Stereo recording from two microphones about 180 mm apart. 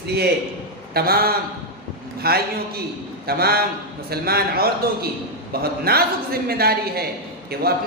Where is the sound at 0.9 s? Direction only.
55° right (ahead or behind).